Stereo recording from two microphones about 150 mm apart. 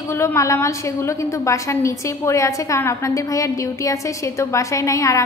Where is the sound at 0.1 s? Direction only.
20° left (ahead or behind).